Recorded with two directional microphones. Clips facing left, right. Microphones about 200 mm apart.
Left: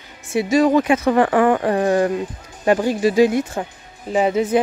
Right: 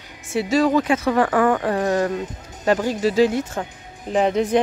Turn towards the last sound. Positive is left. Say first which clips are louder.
# left 1 dB
turn(degrees=5)  # may be behind; listen again after turning